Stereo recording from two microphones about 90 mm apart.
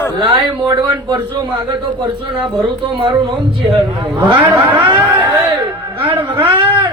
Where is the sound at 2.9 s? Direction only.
65° right (ahead or behind).